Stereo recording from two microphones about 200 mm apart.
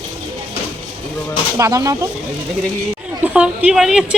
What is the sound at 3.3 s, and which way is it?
Speech, 5° right (ahead or behind).